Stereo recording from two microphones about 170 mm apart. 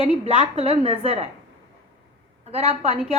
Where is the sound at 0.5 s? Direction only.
35° right (ahead or behind).